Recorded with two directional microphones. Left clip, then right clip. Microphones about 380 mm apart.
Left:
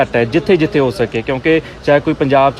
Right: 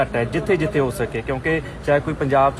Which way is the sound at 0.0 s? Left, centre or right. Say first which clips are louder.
Left 8 dB; left.